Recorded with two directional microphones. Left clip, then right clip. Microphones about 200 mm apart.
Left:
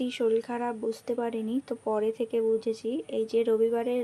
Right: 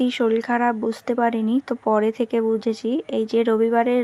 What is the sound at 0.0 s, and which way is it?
Speech, 15° right (ahead or behind).